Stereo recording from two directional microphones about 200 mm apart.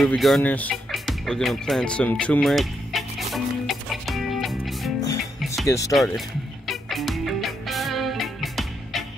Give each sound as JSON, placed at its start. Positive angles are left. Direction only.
{"t": 0.0, "sound": "music", "side_deg": 0}
{"t": 5.7, "sound": "speech", "side_deg": 15}
{"t": 6.7, "sound": "music", "side_deg": 0}